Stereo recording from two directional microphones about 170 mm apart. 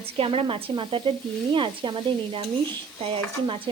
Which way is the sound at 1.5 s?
30° right (ahead or behind).